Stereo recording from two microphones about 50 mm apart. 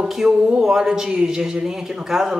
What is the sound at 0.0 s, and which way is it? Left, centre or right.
Speech, centre.